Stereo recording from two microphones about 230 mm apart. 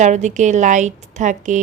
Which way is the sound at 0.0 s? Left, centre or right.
Right.